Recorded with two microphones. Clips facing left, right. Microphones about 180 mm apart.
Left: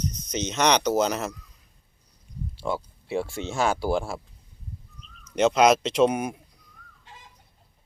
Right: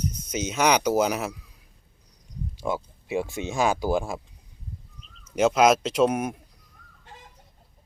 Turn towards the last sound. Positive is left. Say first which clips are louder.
# right 2 dB
turn(degrees=-50)  # may be behind; listen again after turning